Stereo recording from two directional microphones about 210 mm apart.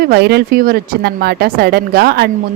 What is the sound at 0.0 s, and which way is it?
A woman's voice, 50° right (ahead or behind).